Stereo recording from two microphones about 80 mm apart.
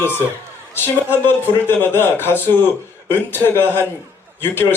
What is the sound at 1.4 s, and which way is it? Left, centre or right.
A man's voice, left.